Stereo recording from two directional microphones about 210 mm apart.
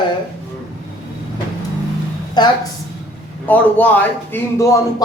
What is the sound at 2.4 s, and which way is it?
Speech, 20° left (ahead or behind).